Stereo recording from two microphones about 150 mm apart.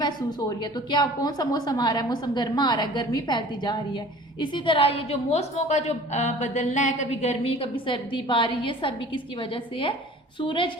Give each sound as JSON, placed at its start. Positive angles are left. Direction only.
{"t": 0.0, "sound": "a woman's voice", "side_deg": 30}